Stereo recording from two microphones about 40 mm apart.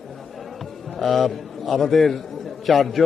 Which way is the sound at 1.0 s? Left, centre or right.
Centre.